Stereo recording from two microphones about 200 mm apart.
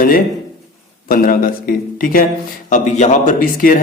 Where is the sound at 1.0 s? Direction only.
45° left (ahead or behind).